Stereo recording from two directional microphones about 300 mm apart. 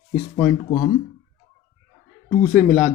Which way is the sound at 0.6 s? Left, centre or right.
Centre.